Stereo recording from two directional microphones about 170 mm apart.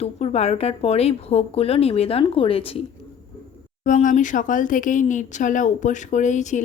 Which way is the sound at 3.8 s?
50° left (ahead or behind).